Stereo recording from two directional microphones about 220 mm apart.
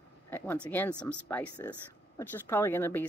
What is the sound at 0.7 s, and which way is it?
Speech, 10° left (ahead or behind).